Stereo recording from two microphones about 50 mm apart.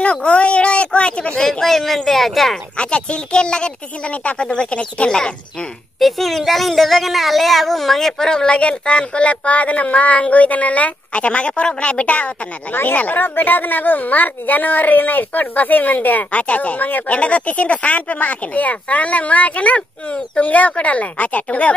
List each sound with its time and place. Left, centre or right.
0.0 s a woman's voice: left
1.4 s speech: centre
2.8 s a child's voice: left
5.9 s a child's voice: centre; by 21.7 s left